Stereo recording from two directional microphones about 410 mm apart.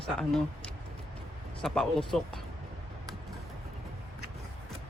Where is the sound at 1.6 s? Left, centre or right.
Centre.